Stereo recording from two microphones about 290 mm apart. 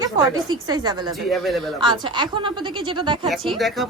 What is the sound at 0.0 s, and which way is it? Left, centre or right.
A woman's voice, centre.